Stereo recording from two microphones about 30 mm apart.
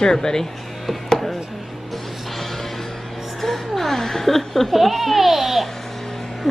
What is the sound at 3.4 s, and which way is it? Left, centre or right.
Speech, centre.